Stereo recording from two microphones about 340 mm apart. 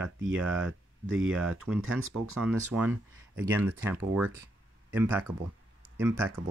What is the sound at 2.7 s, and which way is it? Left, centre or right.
Speech, centre.